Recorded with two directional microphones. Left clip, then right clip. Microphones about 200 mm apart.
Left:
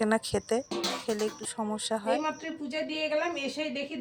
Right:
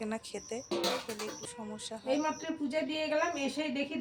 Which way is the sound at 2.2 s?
25° left (ahead or behind).